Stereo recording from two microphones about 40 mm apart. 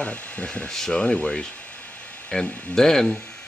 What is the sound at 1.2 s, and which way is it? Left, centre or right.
Speech, left.